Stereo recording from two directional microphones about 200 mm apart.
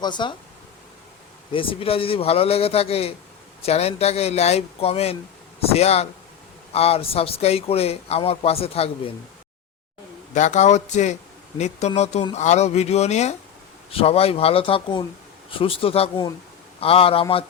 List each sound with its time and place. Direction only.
0.0 s speech: 20° left (ahead or behind)
1.5 s speech: 25° left (ahead or behind)
10.3 s speech: 35° left (ahead or behind)